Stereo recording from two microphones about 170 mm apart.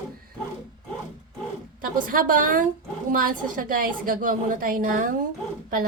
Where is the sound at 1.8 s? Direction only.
55° right (ahead or behind).